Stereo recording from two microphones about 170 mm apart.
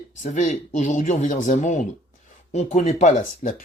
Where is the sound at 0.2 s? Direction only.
45° left (ahead or behind).